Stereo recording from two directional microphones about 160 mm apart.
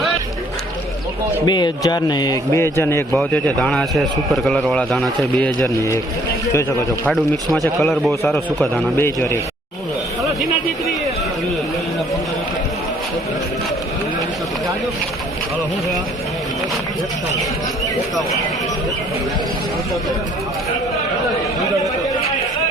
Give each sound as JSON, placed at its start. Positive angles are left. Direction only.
{"t": 1.5, "sound": "a man's voice", "side_deg": 25}
{"t": 3.1, "sound": "a man's voice", "side_deg": 5}
{"t": 5.6, "sound": "a man's voice", "side_deg": 20}
{"t": 7.1, "sound": "a man's voice", "side_deg": 0}
{"t": 9.0, "sound": "a man's voice", "side_deg": 15}